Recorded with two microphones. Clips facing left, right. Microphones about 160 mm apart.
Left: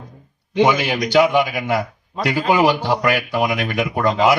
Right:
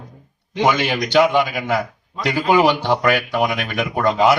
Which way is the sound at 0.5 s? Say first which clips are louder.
Left 2 dB; 10° left (ahead or behind).